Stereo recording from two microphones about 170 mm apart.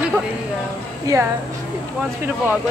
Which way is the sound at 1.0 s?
15° right (ahead or behind).